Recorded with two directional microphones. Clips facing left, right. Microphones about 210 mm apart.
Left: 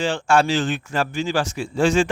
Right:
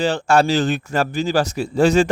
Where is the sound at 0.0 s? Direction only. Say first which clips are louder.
Right 2 dB; 40° right (ahead or behind).